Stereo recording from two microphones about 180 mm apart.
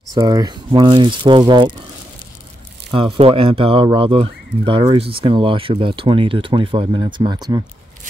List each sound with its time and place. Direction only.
0.1 s speech: 20° right (ahead or behind)
2.9 s speech: 30° right (ahead or behind)